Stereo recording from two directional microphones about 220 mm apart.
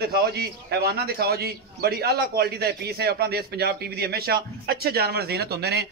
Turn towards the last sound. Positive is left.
turn(degrees=-50)  # may be behind; listen again after turning